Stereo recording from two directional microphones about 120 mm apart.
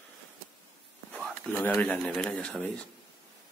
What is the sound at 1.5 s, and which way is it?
Speech, 15° left (ahead or behind).